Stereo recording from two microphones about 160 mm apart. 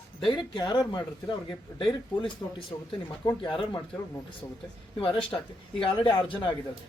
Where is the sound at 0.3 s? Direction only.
25° left (ahead or behind).